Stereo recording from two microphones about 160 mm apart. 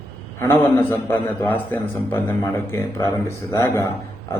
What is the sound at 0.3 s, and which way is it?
A man's voice, 15° left (ahead or behind).